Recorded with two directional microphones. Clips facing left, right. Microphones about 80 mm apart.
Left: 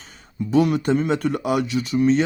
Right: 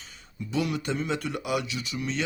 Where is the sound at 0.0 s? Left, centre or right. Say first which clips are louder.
Left 10 dB; left.